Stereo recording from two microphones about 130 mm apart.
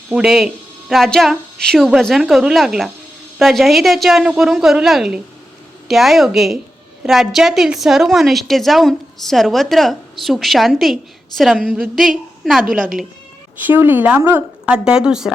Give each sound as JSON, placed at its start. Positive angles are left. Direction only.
{"t": 0.1, "sound": "a woman's voice", "side_deg": -5}
{"t": 12.6, "sound": "speech", "side_deg": -90}
{"t": 13.7, "sound": "speech", "side_deg": -15}